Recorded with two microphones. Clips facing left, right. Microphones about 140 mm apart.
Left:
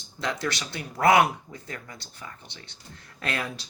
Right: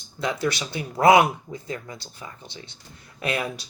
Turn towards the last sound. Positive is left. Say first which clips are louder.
# right 4 dB
turn(degrees=-15)  # may be behind; listen again after turning